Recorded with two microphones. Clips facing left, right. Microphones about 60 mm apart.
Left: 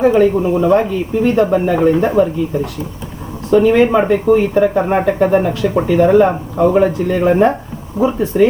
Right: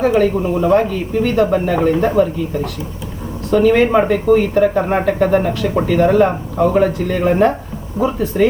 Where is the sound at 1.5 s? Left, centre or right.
Centre.